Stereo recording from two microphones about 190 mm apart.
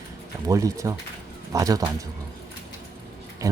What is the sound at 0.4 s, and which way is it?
Speech, 15° right (ahead or behind).